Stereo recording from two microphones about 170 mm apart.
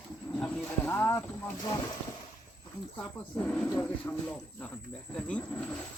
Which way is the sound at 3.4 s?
10° left (ahead or behind).